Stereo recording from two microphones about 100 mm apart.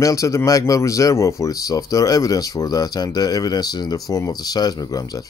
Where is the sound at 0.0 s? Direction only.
30° left (ahead or behind).